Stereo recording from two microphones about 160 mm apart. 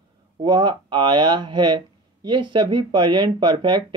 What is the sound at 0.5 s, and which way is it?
Speech, 30° right (ahead or behind).